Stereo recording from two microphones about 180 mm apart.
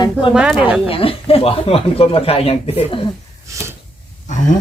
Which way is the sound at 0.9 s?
30° left (ahead or behind).